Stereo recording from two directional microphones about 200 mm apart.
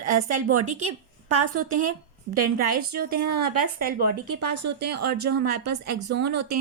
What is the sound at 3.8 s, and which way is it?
Speech, 50° right (ahead or behind).